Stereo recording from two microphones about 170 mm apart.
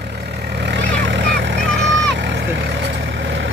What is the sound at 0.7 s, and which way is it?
Vehicle, 90° right.